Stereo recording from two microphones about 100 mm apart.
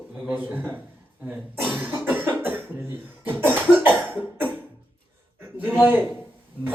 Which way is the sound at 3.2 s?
20° right (ahead or behind).